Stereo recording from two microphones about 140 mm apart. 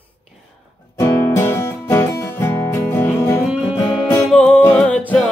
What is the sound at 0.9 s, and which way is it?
Music, 20° left (ahead or behind).